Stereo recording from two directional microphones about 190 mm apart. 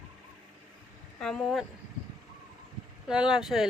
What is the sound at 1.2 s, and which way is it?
Speech, centre (ahead or behind).